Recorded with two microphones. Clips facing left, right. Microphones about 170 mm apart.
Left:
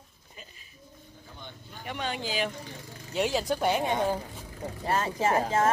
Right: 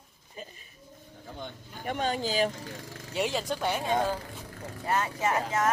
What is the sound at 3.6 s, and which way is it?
Speech, 15° left (ahead or behind).